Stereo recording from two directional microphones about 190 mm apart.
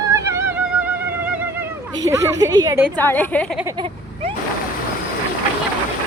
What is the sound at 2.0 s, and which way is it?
Speech, 20° right (ahead or behind).